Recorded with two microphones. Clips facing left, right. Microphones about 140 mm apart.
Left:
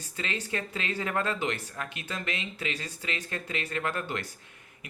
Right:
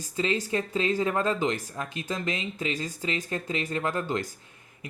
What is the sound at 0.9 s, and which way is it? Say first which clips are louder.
Speech: right 5 dB; 20° right (ahead or behind).